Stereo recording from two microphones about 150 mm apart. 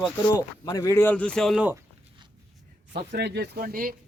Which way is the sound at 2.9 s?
90° right.